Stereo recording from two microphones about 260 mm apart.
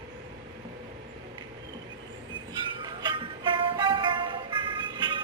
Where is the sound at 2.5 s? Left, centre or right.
Centre.